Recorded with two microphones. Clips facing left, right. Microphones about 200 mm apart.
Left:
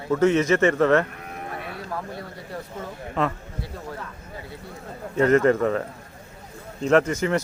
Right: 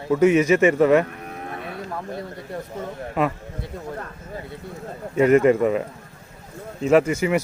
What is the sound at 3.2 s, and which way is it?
Speech, 10° right (ahead or behind).